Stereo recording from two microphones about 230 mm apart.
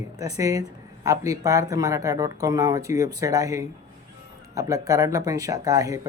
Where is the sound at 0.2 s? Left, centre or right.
Centre.